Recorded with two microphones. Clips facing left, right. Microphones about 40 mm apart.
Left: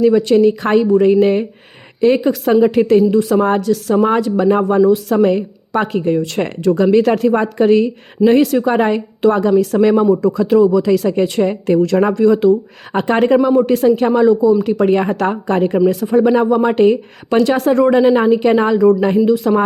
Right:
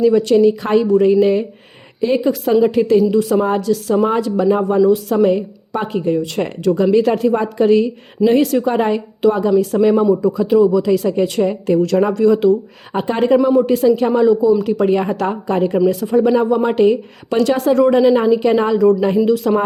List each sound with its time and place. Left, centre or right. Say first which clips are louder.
0.0 s speech: left 1 dB; left
4.8 s speech: left 1 dB; left
9.5 s speech: left 1 dB; left
10.3 s speech: left 1 dB; left
12.9 s speech: left 2 dB; left